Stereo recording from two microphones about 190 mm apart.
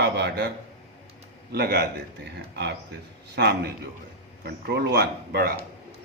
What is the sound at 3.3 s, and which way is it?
Speech, 60° right (ahead or behind).